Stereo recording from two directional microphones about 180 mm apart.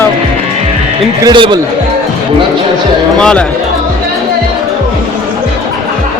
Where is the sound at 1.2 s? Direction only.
25° right (ahead or behind).